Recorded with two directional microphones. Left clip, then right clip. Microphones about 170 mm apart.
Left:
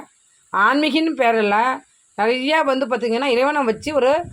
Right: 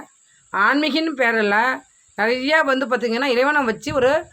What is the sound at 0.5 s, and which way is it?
A woman's voice, centre (ahead or behind).